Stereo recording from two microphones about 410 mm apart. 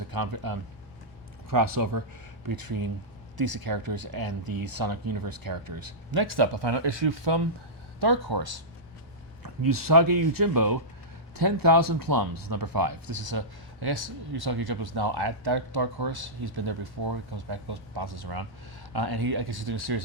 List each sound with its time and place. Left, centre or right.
0.1 s speech: right
7.9 s speech: right